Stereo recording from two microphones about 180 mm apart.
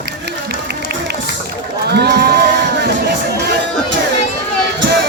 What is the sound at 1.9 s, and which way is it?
Speech, 65° right (ahead or behind).